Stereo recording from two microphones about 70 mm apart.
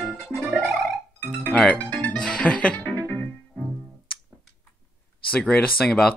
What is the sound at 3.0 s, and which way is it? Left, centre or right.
Music, left.